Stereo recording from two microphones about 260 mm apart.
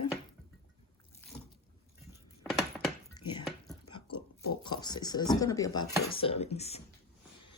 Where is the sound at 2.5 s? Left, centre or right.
Centre.